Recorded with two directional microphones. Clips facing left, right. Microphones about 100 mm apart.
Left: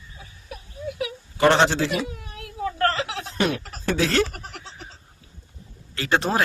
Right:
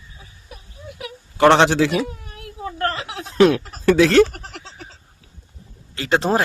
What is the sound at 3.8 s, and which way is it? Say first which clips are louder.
Speech: right 9 dB; 85° right.